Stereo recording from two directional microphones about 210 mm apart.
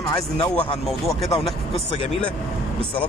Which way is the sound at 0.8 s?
Centre (ahead or behind).